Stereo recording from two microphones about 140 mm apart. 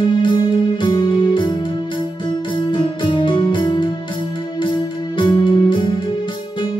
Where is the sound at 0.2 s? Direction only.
30° left (ahead or behind).